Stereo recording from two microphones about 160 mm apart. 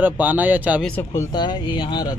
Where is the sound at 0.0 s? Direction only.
10° right (ahead or behind).